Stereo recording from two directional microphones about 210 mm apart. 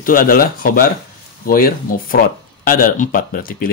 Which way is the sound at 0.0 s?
40° left (ahead or behind).